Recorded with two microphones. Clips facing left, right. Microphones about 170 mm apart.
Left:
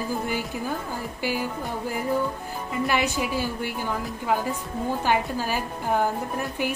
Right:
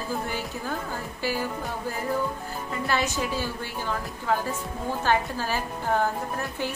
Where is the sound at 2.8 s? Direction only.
15° left (ahead or behind).